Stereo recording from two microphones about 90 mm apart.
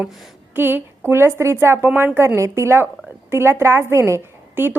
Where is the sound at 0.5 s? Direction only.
25° right (ahead or behind).